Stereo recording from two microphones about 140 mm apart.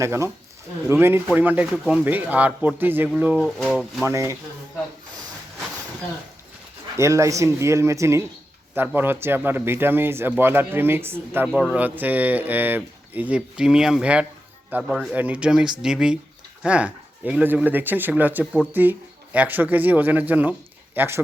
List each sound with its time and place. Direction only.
0.0 s speech: 20° right (ahead or behind)
3.4 s speech: 5° left (ahead or behind)
4.0 s speech: 20° right (ahead or behind)
6.9 s speech: 20° right (ahead or behind)